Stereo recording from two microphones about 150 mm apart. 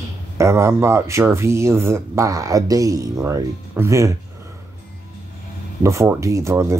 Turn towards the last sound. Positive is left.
turn(degrees=-20)  # may be behind; listen again after turning